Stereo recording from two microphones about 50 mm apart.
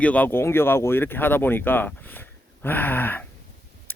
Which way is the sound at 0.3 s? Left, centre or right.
Left.